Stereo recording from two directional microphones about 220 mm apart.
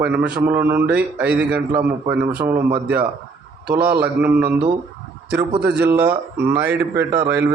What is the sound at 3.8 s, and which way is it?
Speech, 5° right (ahead or behind).